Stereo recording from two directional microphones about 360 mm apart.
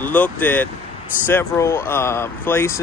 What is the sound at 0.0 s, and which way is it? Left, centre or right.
Speech, centre.